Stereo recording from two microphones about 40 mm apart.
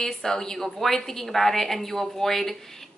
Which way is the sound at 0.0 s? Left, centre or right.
Centre.